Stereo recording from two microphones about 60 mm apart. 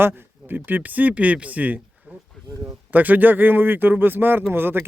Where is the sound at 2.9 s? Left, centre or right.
Right.